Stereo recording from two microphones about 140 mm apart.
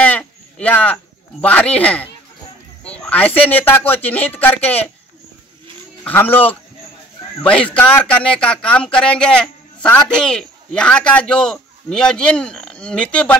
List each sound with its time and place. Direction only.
0.0 s a sound: 10° left (ahead or behind)
2.8 s speech: 10° left (ahead or behind)
6.0 s speech: 15° left (ahead or behind)